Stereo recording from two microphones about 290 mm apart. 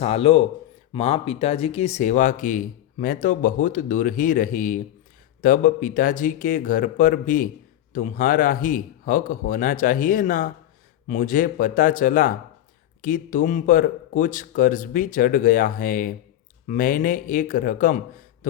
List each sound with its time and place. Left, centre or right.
0.0 s speech: left